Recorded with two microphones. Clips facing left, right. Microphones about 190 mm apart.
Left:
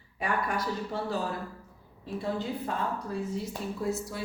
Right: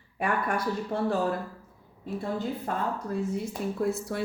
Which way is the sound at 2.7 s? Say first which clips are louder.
Right 3 dB; 50° right (ahead or behind).